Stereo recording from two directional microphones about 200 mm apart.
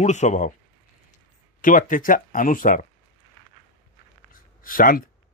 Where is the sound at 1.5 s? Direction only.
40° left (ahead or behind).